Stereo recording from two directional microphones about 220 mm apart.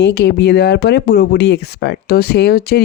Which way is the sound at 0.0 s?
45° left (ahead or behind).